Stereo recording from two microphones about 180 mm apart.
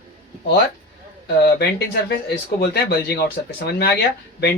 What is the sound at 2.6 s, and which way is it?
Speech, 60° left (ahead or behind).